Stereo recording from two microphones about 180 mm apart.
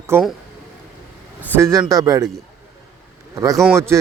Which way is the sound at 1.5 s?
15° right (ahead or behind).